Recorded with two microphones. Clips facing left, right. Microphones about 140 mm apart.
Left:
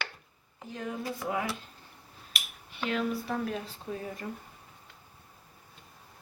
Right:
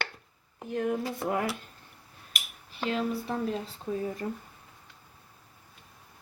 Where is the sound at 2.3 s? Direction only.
35° right (ahead or behind).